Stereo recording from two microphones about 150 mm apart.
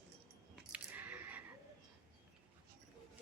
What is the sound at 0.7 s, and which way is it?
Coin, 10° right (ahead or behind).